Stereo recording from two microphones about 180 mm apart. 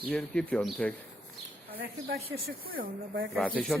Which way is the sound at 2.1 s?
60° right (ahead or behind).